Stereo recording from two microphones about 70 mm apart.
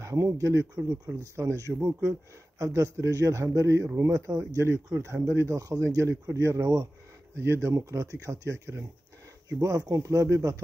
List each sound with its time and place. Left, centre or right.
0.0 s a man's voice: right
1.8 s speech: right
2.6 s a man's voice: right
7.3 s a man's voice: right
9.5 s a man's voice: right